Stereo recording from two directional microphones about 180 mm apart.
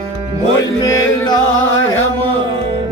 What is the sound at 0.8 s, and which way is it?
Music, 20° left (ahead or behind).